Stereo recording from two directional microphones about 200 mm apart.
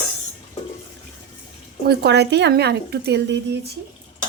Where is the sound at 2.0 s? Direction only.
55° right (ahead or behind).